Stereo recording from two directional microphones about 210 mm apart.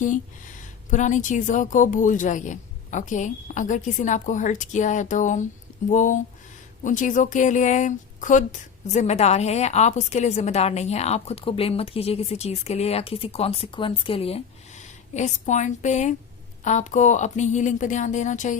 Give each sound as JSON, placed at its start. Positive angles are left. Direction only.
{"t": 0.9, "sound": "speech", "side_deg": 35}